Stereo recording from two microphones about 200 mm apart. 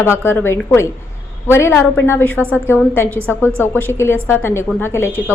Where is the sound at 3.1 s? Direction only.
10° right (ahead or behind).